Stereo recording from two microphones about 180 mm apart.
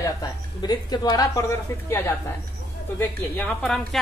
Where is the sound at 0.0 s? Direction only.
20° left (ahead or behind).